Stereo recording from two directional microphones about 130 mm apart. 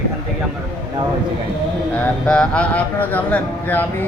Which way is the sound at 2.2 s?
5° left (ahead or behind).